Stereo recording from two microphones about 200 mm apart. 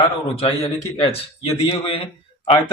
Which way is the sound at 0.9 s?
30° left (ahead or behind).